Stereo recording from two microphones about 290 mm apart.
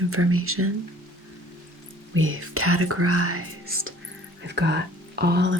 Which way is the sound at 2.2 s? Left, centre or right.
Right.